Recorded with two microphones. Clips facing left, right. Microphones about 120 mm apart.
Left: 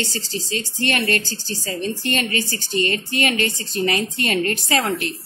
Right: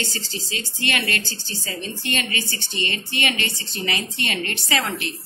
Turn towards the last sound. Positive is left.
turn(degrees=40)  # may be behind; listen again after turning